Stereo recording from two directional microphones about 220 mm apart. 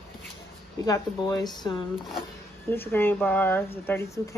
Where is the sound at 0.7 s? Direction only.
15° left (ahead or behind).